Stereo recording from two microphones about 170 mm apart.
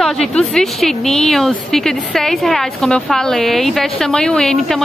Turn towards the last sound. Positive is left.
turn(degrees=5)  # may be behind; listen again after turning